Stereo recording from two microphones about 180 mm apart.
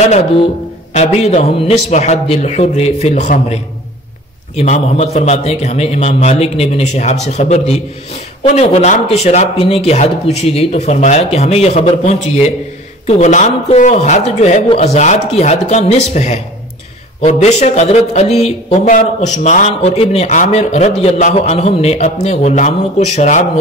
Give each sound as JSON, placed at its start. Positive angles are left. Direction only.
{"t": 0.9, "sound": "speech", "side_deg": 35}
{"t": 4.6, "sound": "speech", "side_deg": 35}